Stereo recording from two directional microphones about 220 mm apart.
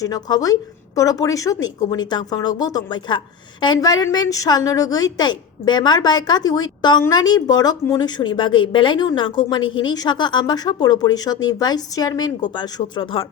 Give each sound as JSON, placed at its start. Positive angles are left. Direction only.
{"t": 0.0, "sound": "a woman's voice", "side_deg": 15}